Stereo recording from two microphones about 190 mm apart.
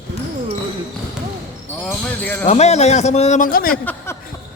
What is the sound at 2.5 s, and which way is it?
A man's voice, 35° left (ahead or behind).